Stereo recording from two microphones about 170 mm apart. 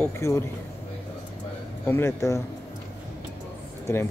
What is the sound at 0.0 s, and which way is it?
Speech, 15° left (ahead or behind).